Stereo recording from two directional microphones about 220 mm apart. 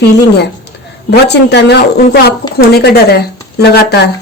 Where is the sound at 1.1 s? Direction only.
50° left (ahead or behind).